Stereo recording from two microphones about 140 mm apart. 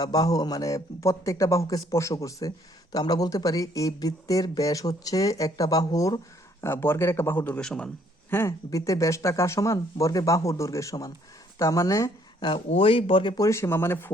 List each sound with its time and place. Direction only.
0.0 s a man's voice: 25° left (ahead or behind); by 7.9 s 5° left (ahead or behind)
8.3 s speech: 20° left (ahead or behind)
12.4 s speech: 40° left (ahead or behind); by 14.1 s 15° left (ahead or behind)